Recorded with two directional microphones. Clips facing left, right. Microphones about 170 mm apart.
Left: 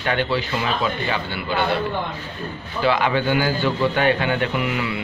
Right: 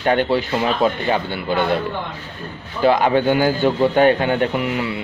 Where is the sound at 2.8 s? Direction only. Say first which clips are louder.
Right 5 dB; 45° right (ahead or behind).